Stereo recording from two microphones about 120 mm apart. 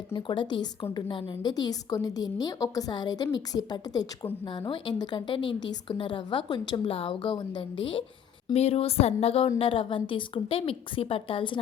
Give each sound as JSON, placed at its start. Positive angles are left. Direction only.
{"t": 0.2, "sound": "a woman's voice", "side_deg": 40}
{"t": 8.5, "sound": "a woman's voice", "side_deg": 55}